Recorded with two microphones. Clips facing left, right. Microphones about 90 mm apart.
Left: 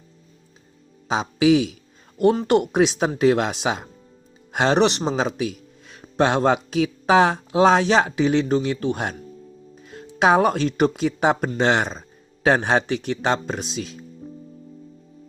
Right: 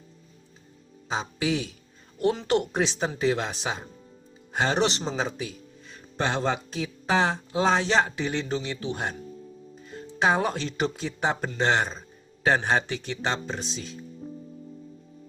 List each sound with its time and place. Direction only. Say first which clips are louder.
1.0 s speech: left 10 dB; 80° left
2.1 s speech: left 6 dB; 55° left (ahead or behind); by 14.0 s 70° left (ahead or behind)